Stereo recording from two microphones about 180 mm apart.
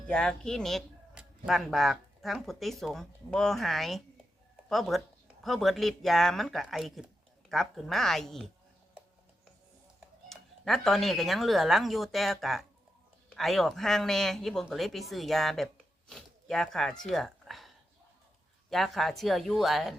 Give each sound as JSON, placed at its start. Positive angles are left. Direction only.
{"t": 0.1, "sound": "speech", "side_deg": 5}
{"t": 10.2, "sound": "speech", "side_deg": 0}
{"t": 18.7, "sound": "speech", "side_deg": 0}